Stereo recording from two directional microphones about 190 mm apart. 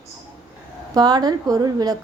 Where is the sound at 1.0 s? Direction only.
20° right (ahead or behind).